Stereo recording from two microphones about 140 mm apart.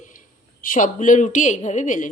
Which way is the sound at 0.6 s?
70° left (ahead or behind).